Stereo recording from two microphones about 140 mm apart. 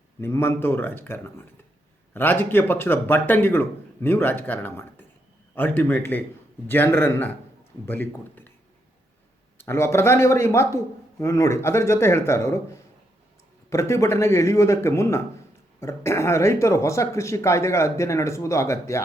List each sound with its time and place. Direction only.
0.2 s speech: 20° left (ahead or behind)
9.6 s speech: 20° left (ahead or behind)
13.7 s speech: 20° left (ahead or behind)